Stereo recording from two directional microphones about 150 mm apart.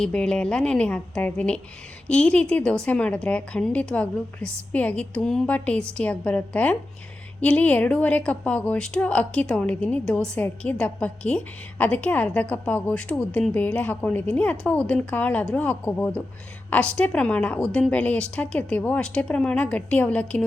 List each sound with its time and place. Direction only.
0.0 s a woman's voice: 5° left (ahead or behind)